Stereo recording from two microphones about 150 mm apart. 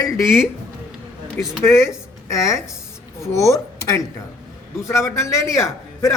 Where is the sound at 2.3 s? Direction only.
20° left (ahead or behind).